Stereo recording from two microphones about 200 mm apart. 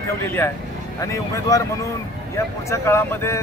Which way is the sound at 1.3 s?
15° left (ahead or behind).